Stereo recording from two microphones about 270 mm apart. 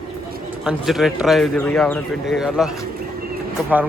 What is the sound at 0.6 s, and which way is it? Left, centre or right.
Speech, centre.